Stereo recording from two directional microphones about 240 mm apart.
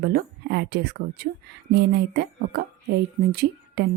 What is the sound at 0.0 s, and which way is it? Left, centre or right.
A woman's voice, right.